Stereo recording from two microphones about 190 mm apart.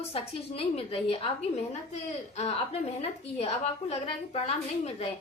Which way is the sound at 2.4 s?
30° left (ahead or behind).